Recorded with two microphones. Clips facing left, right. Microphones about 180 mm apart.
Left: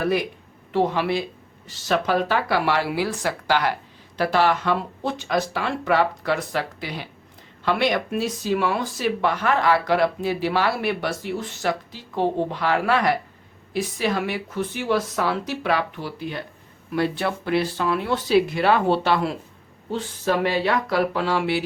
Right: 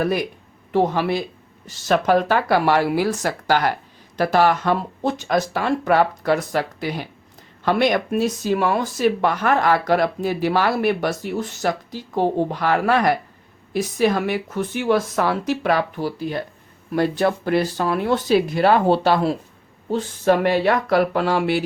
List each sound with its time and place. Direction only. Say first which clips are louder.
0.7 s speech: right 2 dB; 45° right (ahead or behind)